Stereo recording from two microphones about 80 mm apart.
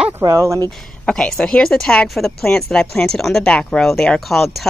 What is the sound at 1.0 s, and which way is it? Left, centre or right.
A woman's voice, centre.